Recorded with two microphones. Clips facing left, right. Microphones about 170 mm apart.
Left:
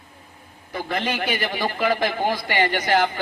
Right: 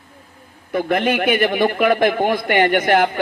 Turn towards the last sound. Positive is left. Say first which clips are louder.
# right 5 dB
turn(degrees=-55)  # may be behind; listen again after turning